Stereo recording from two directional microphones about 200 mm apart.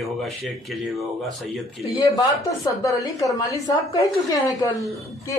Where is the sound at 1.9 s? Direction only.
20° left (ahead or behind).